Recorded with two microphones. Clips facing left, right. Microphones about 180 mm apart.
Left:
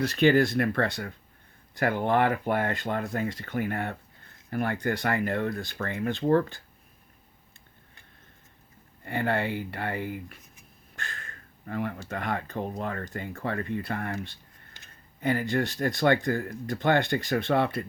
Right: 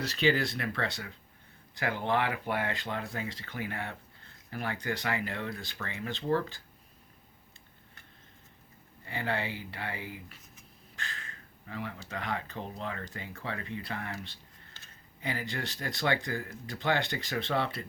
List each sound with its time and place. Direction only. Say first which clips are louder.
0.0 s speech: left 7 dB; 55° left (ahead or behind)
9.0 s speech: left 6 dB; 55° left (ahead or behind)
14.8 s a sound: left 3 dB; 15° left (ahead or behind)
15.2 s speech: left 10 dB; 50° left (ahead or behind)